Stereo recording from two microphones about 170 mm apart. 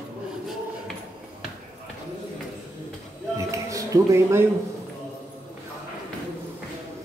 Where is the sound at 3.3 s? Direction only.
20° right (ahead or behind).